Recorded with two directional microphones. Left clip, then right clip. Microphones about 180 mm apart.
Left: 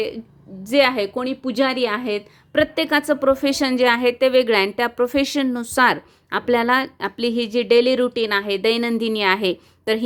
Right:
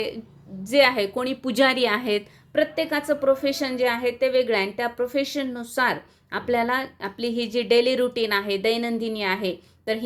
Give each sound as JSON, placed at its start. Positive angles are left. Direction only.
{"t": 0.6, "sound": "a woman's voice", "side_deg": 25}
{"t": 2.5, "sound": "a woman's voice", "side_deg": 40}